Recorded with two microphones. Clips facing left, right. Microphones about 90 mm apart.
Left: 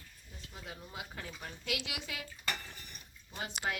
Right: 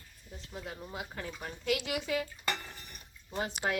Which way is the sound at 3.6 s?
20° right (ahead or behind).